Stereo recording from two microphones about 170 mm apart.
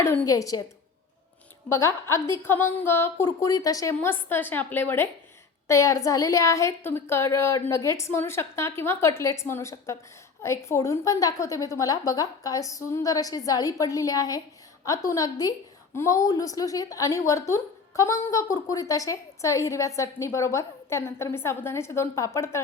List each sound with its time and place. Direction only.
0.0 s a woman's voice: 15° left (ahead or behind)
1.7 s a woman's voice: 15° left (ahead or behind)